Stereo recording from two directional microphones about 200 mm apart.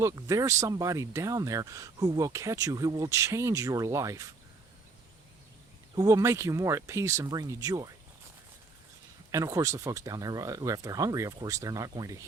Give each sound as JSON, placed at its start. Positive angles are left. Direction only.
{"t": 0.0, "sound": "speech", "side_deg": -15}
{"t": 6.0, "sound": "speech", "side_deg": -15}
{"t": 9.3, "sound": "speech", "side_deg": -15}